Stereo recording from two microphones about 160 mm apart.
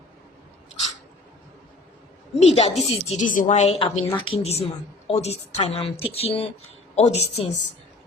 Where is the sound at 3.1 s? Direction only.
55° left (ahead or behind).